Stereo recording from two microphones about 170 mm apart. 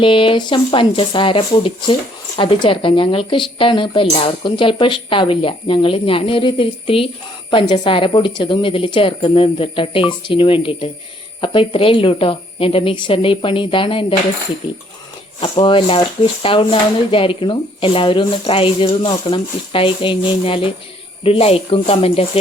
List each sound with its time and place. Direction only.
0.0 s speech: 30° left (ahead or behind)
15.4 s speech: 30° left (ahead or behind)